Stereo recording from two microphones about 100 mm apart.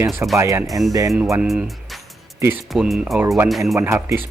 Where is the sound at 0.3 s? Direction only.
30° right (ahead or behind).